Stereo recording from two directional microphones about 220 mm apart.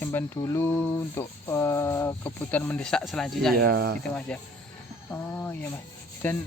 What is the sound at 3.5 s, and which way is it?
Speech, 45° right (ahead or behind).